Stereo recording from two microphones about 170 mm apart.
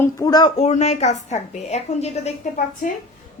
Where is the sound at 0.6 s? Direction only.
40° left (ahead or behind).